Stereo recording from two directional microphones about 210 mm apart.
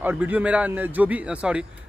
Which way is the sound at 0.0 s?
10° right (ahead or behind).